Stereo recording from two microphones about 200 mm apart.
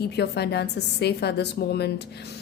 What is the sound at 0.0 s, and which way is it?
A woman's voice, 55° left (ahead or behind).